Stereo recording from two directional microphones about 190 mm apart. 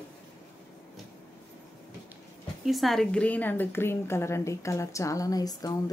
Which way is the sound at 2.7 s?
Centre (ahead or behind).